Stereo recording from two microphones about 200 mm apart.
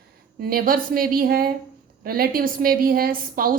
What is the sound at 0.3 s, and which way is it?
A woman's voice, 50° right (ahead or behind).